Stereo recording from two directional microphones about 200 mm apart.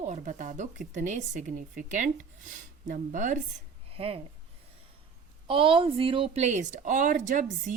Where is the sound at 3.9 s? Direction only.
30° right (ahead or behind).